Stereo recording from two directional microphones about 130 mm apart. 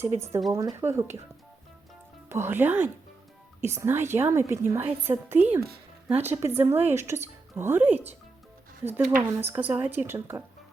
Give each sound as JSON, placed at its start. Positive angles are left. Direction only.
{"t": 0.0, "sound": "a woman's voice", "side_deg": -20}
{"t": 2.3, "sound": "a woman's voice", "side_deg": -15}
{"t": 9.1, "sound": "speech", "side_deg": -15}